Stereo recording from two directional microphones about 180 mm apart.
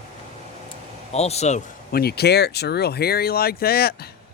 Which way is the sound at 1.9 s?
60° left (ahead or behind).